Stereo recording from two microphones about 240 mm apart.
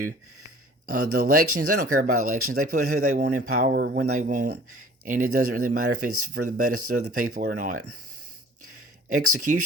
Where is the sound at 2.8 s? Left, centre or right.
Right.